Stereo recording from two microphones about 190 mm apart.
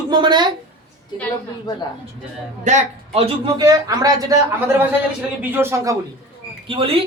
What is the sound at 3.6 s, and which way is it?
Speech, 20° right (ahead or behind).